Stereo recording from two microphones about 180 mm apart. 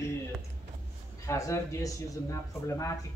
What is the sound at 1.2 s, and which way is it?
Speech, 15° left (ahead or behind).